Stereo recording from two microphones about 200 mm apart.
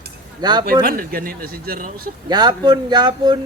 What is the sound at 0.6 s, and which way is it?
Speech, 45° right (ahead or behind).